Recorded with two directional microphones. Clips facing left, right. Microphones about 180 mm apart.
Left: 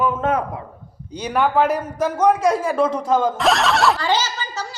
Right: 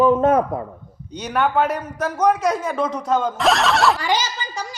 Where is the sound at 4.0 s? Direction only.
10° right (ahead or behind).